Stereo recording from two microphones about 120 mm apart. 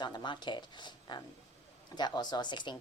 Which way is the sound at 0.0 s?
35° left (ahead or behind).